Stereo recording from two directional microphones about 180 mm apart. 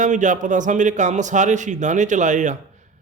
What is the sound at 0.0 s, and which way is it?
Speech, 45° right (ahead or behind).